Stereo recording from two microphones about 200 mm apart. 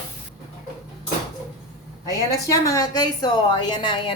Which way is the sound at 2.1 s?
15° left (ahead or behind).